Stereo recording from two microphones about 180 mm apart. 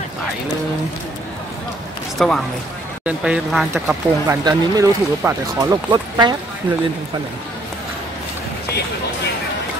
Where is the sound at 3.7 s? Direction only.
15° right (ahead or behind).